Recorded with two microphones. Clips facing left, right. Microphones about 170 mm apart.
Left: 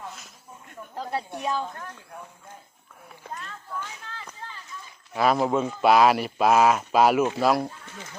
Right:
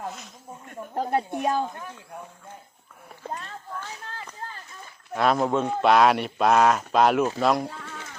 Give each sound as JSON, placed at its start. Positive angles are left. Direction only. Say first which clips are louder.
{"t": 0.8, "sound": "snake", "louder": "right 6 dB", "side_deg": -50}
{"t": 1.4, "sound": "speech", "louder": "right 2 dB", "side_deg": -50}
{"t": 1.7, "sound": "speech", "louder": "right 1 dB", "side_deg": -15}
{"t": 3.2, "sound": "speech", "louder": "right 3 dB", "side_deg": -35}
{"t": 5.1, "sound": "a man's voice", "louder": "even", "side_deg": 0}